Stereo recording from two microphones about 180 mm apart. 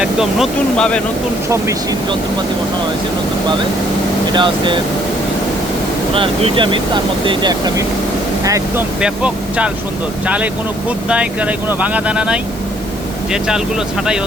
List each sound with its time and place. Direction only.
0.0 s speech: centre (ahead or behind)
1.5 s speech: 20° right (ahead or behind)
4.3 s speech: 25° right (ahead or behind)
6.1 s speech: 30° right (ahead or behind)
9.0 s speech: 5° right (ahead or behind)